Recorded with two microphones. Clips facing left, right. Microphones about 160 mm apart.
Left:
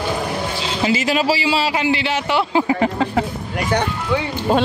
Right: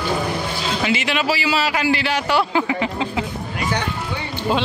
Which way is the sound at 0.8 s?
35° left (ahead or behind).